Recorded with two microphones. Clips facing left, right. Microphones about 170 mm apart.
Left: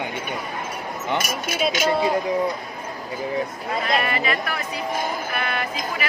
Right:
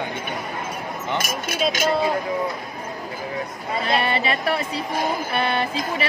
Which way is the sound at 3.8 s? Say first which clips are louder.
Right 2 dB; 30° right (ahead or behind).